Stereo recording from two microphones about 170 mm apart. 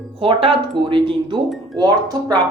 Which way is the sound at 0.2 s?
30° right (ahead or behind).